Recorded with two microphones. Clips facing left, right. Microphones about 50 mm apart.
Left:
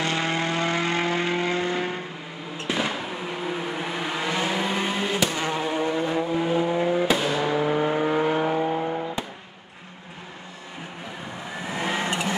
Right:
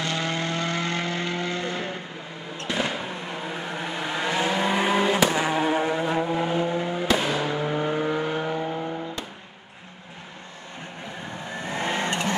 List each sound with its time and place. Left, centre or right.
0.0 s vehicle: left
2.7 s vehicle: centre
4.9 s vehicle: right; by 6.5 s centre
6.5 s vehicle: centre
11.5 s vehicle: centre